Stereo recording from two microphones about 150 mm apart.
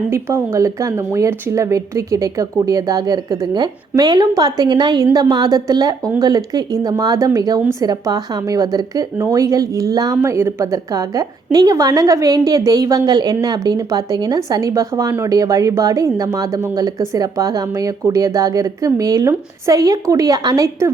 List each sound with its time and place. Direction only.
0.1 s a woman's voice: 15° right (ahead or behind)